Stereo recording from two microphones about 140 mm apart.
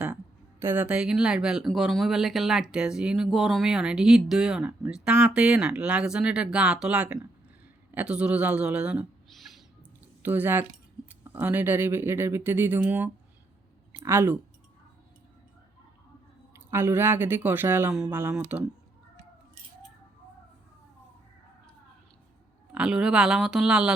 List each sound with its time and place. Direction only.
0.6 s speech: 15° right (ahead or behind)
9.3 s owl: centre (ahead or behind)
10.2 s speech: 15° right (ahead or behind)
16.7 s speech: 15° right (ahead or behind)
22.7 s speech: 5° right (ahead or behind)